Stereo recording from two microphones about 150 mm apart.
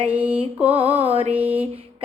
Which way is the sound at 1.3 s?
10° right (ahead or behind).